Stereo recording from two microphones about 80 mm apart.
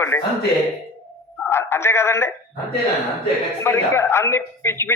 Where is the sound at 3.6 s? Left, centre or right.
Left.